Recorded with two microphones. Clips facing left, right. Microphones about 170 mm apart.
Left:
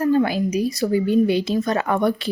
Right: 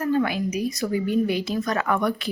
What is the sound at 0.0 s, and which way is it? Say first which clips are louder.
Speech: left 4 dB; 35° left (ahead or behind).